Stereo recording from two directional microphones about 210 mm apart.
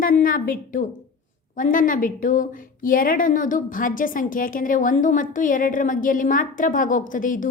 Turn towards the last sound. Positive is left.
turn(degrees=40)  # may be behind; listen again after turning